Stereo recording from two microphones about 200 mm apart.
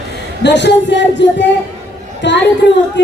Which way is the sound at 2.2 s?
65° left (ahead or behind).